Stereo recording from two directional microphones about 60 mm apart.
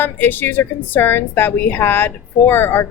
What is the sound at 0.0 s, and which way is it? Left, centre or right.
A woman's voice, left.